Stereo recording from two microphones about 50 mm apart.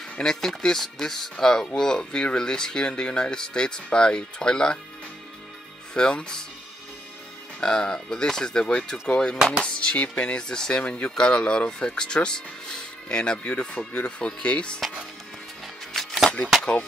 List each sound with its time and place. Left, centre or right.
0.2 s speech: centre
5.9 s speech: centre
7.6 s speech: centre
15.9 s music: centre